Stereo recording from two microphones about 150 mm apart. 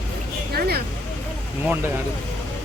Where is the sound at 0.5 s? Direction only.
90° right.